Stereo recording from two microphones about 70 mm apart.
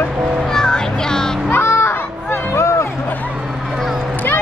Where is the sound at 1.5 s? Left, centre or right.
Left.